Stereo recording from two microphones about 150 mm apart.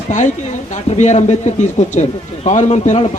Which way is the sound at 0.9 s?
50° left (ahead or behind).